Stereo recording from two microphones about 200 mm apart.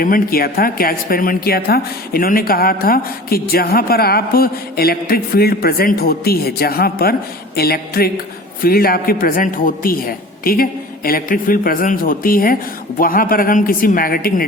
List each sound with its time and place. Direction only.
0.0 s speech: 45° left (ahead or behind)